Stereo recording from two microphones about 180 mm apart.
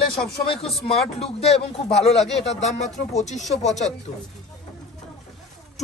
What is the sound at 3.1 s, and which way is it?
Speech, 40° left (ahead or behind).